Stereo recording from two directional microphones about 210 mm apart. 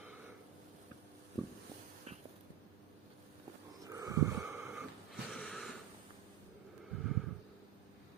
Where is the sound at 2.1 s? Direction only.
30° right (ahead or behind).